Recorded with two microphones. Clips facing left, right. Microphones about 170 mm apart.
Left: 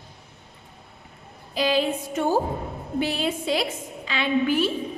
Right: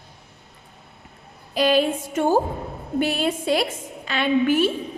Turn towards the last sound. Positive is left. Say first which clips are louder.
# right 3 dB
turn(degrees=-50)  # may be behind; listen again after turning